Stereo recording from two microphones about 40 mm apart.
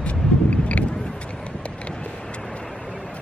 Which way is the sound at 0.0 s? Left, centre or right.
Left.